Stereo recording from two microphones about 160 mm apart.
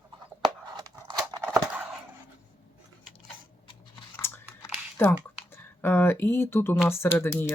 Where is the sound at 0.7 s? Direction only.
25° right (ahead or behind).